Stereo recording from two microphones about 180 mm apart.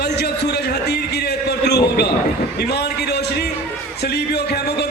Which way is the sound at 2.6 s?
65° left (ahead or behind).